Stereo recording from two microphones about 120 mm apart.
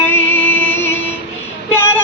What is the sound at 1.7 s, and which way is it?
Child singing, 20° left (ahead or behind).